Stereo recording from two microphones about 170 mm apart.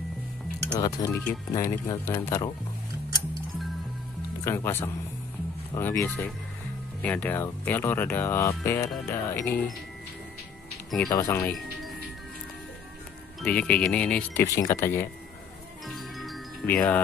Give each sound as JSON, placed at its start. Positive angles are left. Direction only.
{"t": 0.7, "sound": "speech", "side_deg": 20}
{"t": 4.5, "sound": "speech", "side_deg": 15}
{"t": 11.1, "sound": "speech", "side_deg": 15}
{"t": 13.4, "sound": "speech", "side_deg": 10}
{"t": 14.4, "sound": "speech", "side_deg": 20}
{"t": 15.9, "sound": "music", "side_deg": 0}
{"t": 16.6, "sound": "speech", "side_deg": 10}